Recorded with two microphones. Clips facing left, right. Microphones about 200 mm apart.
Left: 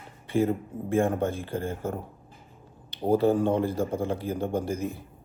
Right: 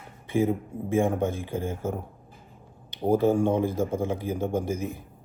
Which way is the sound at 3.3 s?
15° right (ahead or behind).